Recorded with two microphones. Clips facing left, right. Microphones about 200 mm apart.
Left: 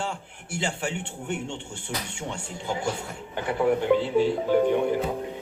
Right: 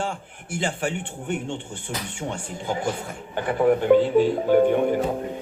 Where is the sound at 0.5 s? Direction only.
55° right (ahead or behind).